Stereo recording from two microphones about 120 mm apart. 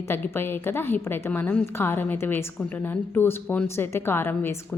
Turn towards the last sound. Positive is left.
turn(degrees=20)  # may be behind; listen again after turning